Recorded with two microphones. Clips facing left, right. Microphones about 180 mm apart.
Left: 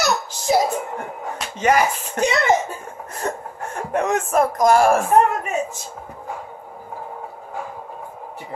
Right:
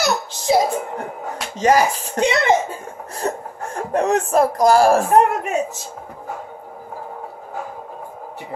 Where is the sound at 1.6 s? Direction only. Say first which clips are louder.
Right 2 dB; 35° right (ahead or behind).